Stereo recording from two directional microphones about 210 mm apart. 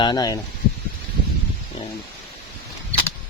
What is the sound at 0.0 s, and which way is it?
Speech, 20° left (ahead or behind).